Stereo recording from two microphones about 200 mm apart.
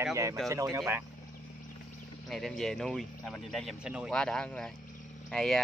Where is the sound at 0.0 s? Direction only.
15° right (ahead or behind).